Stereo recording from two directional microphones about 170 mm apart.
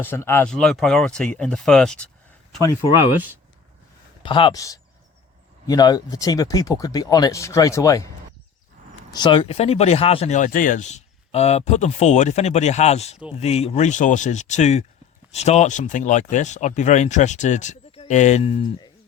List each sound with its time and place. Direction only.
0.0 s speech: 15° left (ahead or behind)
0.4 s speech: 5° left (ahead or behind)
4.2 s speech: 30° left (ahead or behind)
9.1 s speech: 30° left (ahead or behind)